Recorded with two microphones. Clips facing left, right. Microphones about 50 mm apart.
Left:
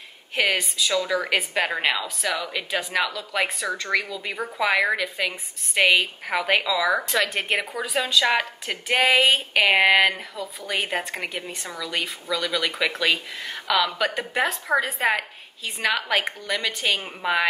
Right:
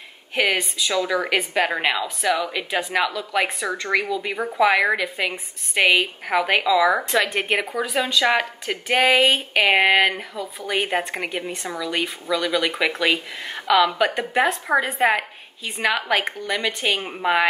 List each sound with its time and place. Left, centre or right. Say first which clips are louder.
0.4 s speech: right 2 dB; centre
1.1 s speech: right 2 dB; centre
3.7 s a woman's voice: right 3 dB; right
5.0 s a woman's voice: right 2 dB; right
5.8 s a woman's voice: right 1 dB; centre
8.0 s speech: right 1 dB; centre
10.4 s a woman's voice: right 3 dB; right
15.9 s speech: right 2 dB; centre